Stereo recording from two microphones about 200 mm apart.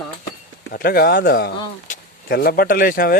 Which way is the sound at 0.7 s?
50° left (ahead or behind).